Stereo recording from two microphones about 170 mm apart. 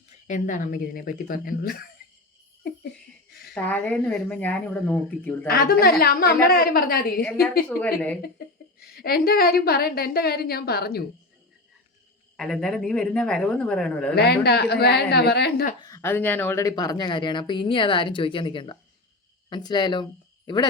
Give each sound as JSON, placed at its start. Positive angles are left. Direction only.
{"t": 0.3, "sound": "a woman's voice", "side_deg": 45}
{"t": 3.5, "sound": "speech", "side_deg": 10}
{"t": 5.5, "sound": "a woman's voice", "side_deg": 65}
{"t": 8.9, "sound": "a woman's voice", "side_deg": 65}
{"t": 12.4, "sound": "a woman's voice", "side_deg": 0}
{"t": 14.2, "sound": "a woman's voice", "side_deg": 70}
{"t": 15.8, "sound": "a woman's voice", "side_deg": 15}